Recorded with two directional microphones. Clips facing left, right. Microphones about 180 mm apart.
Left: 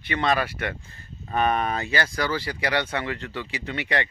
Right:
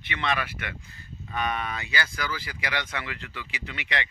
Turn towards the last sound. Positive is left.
turn(degrees=35)  # may be behind; listen again after turning